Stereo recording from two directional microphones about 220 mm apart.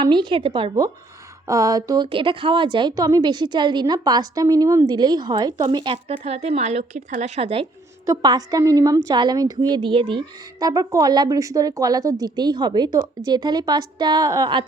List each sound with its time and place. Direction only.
0.0 s a woman's voice: 20° right (ahead or behind)
8.0 s a woman's voice: 15° right (ahead or behind)